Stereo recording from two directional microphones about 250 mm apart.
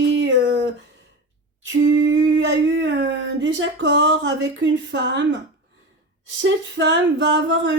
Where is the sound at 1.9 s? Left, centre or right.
Right.